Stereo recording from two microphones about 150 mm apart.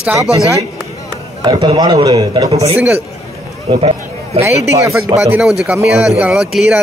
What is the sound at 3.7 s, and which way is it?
Speech, 35° right (ahead or behind).